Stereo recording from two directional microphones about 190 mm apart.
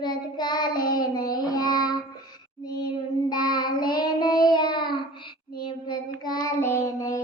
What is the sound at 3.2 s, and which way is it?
Child singing, 20° left (ahead or behind).